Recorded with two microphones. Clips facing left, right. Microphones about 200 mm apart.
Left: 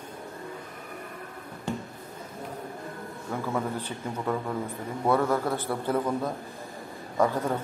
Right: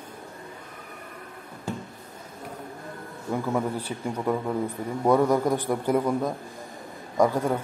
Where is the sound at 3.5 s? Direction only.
10° right (ahead or behind).